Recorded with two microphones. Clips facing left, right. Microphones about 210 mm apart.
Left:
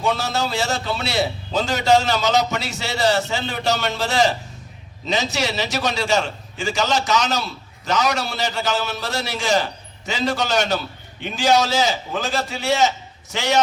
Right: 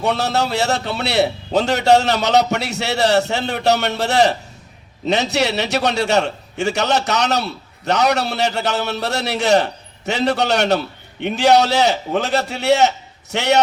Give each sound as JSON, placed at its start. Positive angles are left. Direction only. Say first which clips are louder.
{"t": 0.0, "sound": "a man's voice", "louder": "right 3 dB", "side_deg": -65}